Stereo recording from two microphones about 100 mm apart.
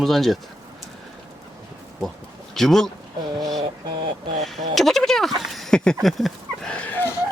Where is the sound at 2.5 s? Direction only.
5° left (ahead or behind).